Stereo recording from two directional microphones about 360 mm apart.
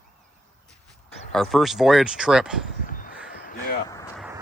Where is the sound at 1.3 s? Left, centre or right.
Centre.